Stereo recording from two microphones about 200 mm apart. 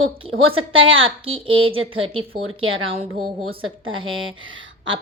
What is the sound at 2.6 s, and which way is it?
A woman's voice, 85° right.